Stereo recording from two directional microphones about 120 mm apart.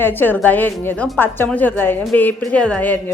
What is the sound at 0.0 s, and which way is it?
Speech, 15° left (ahead or behind).